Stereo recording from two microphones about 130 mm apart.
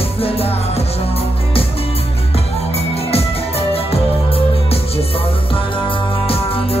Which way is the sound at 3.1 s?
50° left (ahead or behind).